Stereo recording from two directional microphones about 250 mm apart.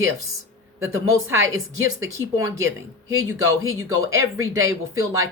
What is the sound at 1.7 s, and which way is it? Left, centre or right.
Speech, right.